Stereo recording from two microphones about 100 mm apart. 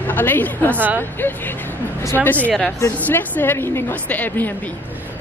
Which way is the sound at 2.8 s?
20° left (ahead or behind).